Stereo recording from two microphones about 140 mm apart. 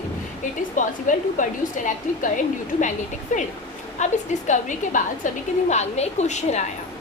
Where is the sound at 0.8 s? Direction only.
65° left (ahead or behind).